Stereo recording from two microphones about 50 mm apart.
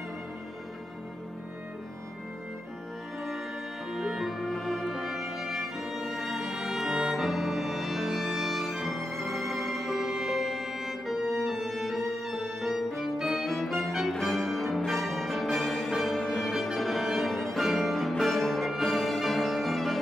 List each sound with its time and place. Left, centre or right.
3.9 s music: centre